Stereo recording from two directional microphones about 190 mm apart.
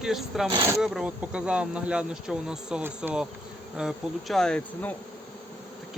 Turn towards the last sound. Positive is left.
turn(degrees=5)  # may be behind; listen again after turning